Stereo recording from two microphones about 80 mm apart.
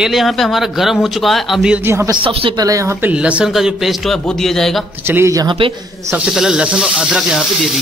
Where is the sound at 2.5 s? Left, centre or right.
Right.